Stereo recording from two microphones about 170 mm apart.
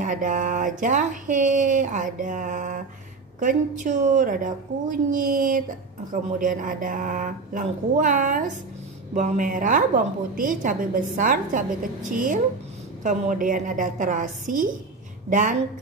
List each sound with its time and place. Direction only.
0.0 s a woman's voice: 50° right (ahead or behind)